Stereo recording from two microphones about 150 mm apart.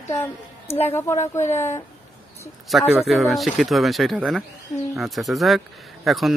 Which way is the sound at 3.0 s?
Centre (ahead or behind).